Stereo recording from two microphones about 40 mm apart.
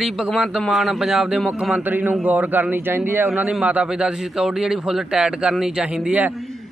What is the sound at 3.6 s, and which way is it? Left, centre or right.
Speech, right.